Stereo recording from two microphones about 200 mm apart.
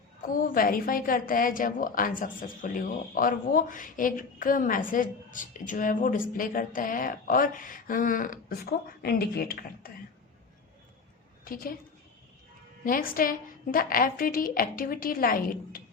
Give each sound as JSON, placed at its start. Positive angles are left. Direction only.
{"t": 0.2, "sound": "a woman's voice", "side_deg": 45}
{"t": 11.4, "sound": "a woman's voice", "side_deg": 45}
{"t": 12.8, "sound": "a woman's voice", "side_deg": 45}